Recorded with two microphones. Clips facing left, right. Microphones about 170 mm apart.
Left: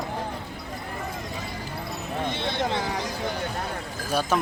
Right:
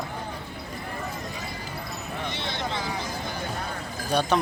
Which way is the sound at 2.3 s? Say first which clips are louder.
Left 5 dB; 55° left (ahead or behind).